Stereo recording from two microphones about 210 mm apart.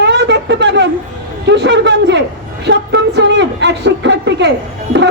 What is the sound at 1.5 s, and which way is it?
A woman's voice, 55° right (ahead or behind).